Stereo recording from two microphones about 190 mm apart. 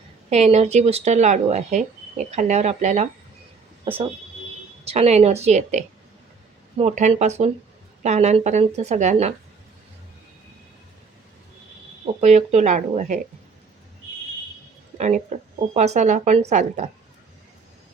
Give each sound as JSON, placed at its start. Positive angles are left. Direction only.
{"t": 0.3, "sound": "speech", "side_deg": -35}
{"t": 12.2, "sound": "speech", "side_deg": -35}
{"t": 14.9, "sound": "speech", "side_deg": -35}